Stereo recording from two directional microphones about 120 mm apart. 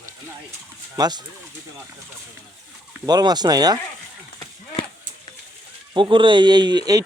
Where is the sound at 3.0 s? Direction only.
35° right (ahead or behind).